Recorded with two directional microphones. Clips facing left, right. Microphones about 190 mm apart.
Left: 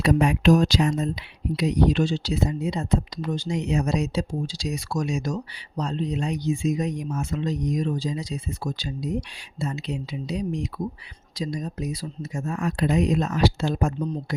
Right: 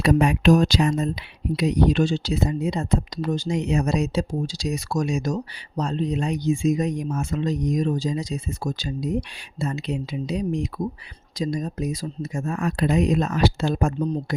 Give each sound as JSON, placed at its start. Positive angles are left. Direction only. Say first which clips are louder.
{"t": 0.0, "sound": "speech", "louder": "right 1 dB", "side_deg": -65}